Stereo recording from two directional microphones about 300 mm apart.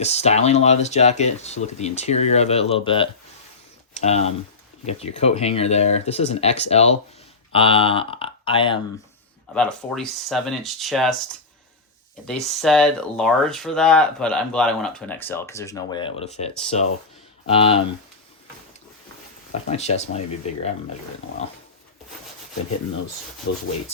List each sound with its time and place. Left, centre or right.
0.0 s speech: left
3.9 s a sound: left
4.9 s speech: left
9.6 s speech: centre
12.2 s speech: centre
19.6 s speech: left
23.5 s sanding: left